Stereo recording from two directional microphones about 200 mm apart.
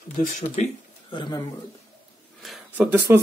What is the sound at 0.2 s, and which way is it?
Speech, 35° left (ahead or behind).